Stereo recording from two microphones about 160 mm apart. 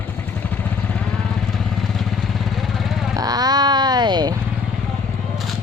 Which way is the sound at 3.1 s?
25° right (ahead or behind).